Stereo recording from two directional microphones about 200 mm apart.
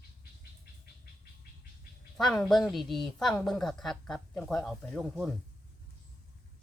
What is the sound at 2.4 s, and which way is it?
A woman's voice, centre (ahead or behind).